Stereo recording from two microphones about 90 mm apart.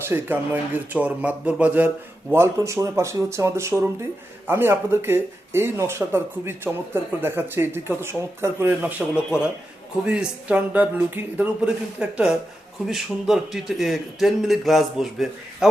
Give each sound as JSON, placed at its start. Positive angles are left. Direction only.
{"t": 0.0, "sound": "speech", "side_deg": -25}
{"t": 2.3, "sound": "speech", "side_deg": -30}
{"t": 11.6, "sound": "a man's voice", "side_deg": -10}